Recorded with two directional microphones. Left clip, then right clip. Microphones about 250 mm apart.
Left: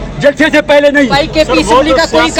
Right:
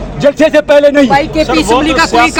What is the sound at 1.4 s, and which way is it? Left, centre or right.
Speech, right.